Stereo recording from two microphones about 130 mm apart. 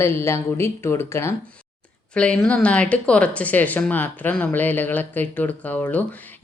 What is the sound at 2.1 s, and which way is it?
Speech, 10° left (ahead or behind).